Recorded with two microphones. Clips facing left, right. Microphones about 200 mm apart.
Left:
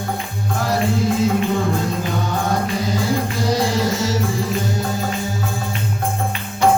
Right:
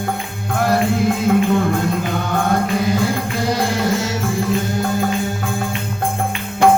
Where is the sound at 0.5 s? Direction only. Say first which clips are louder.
Right 3 dB; 55° right (ahead or behind).